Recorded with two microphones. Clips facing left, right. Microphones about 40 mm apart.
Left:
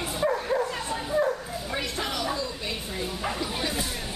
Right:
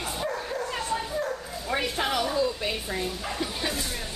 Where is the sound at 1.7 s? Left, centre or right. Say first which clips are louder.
Right 5 dB; centre.